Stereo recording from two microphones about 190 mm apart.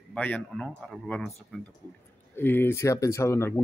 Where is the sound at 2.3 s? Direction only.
10° left (ahead or behind).